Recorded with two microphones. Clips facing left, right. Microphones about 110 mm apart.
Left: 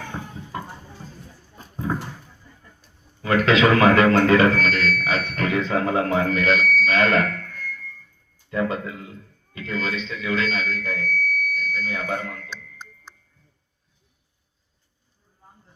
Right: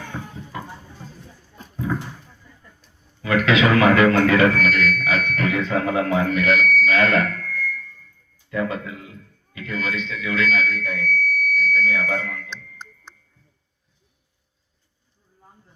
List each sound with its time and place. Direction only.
3.2 s speech: 35° left (ahead or behind)
6.8 s a sound: 30° left (ahead or behind)
8.4 s speech: 30° left (ahead or behind)
11.0 s fire alarm: 50° right (ahead or behind)
11.5 s alarm: 35° left (ahead or behind)
12.5 s music: 5° left (ahead or behind)